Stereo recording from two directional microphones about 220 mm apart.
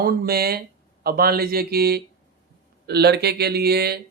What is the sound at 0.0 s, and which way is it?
Speech, 45° right (ahead or behind).